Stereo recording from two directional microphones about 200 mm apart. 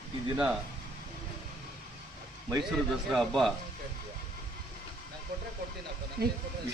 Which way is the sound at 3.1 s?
Centre (ahead or behind).